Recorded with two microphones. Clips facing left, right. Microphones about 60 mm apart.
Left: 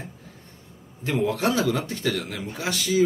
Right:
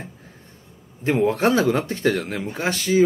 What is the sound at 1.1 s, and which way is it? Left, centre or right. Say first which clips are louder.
A man's voice: right 4 dB; right.